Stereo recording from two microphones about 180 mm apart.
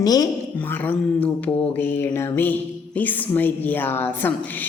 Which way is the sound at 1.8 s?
10° left (ahead or behind).